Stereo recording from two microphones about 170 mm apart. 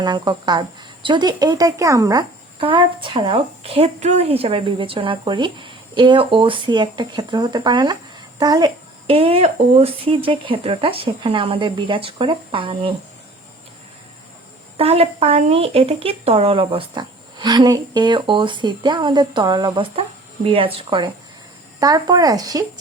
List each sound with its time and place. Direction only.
0.0 s a child's voice: 25° right (ahead or behind)
14.8 s speech: 35° right (ahead or behind)